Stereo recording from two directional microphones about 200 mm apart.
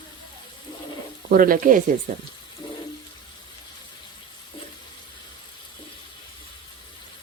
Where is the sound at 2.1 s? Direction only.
40° right (ahead or behind).